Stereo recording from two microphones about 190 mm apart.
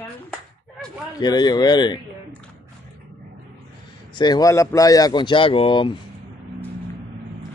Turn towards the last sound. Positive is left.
turn(degrees=25)  # may be behind; listen again after turning